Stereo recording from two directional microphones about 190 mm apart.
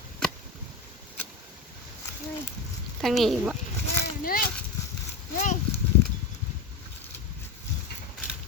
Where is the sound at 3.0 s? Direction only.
Centre (ahead or behind).